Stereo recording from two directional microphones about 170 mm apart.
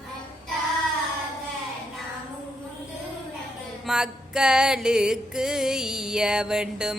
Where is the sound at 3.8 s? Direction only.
5° right (ahead or behind).